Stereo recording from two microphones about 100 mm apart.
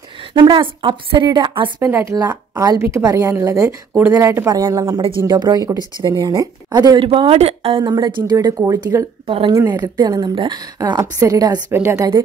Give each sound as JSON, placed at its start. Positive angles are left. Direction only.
{"t": 0.3, "sound": "a woman's voice", "side_deg": -55}
{"t": 1.9, "sound": "speech", "side_deg": -30}
{"t": 2.1, "sound": "a woman's voice", "side_deg": -40}
{"t": 7.0, "sound": "speech", "side_deg": -65}
{"t": 7.8, "sound": "a woman's voice", "side_deg": -45}
{"t": 9.2, "sound": "speech", "side_deg": -65}
{"t": 9.7, "sound": "a woman's voice", "side_deg": -40}
{"t": 10.2, "sound": "a woman's voice", "side_deg": -55}